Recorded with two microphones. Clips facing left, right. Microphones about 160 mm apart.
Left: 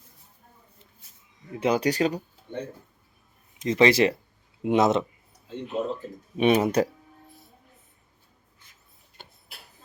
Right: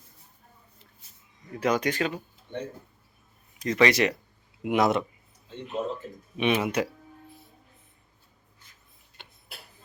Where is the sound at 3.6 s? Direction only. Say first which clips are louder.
Left 3 dB; 25° left (ahead or behind).